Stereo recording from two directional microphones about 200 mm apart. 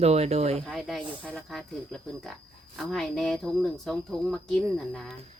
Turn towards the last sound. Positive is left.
turn(degrees=0)  # may be behind; listen again after turning